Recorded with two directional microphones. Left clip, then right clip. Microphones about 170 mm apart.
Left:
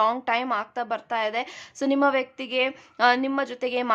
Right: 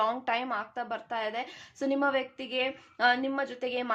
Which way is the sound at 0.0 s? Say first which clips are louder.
Left 6 dB; 30° left (ahead or behind).